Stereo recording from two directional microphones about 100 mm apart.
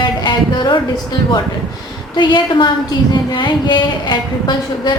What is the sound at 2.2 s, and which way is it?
A woman's voice, 50° left (ahead or behind).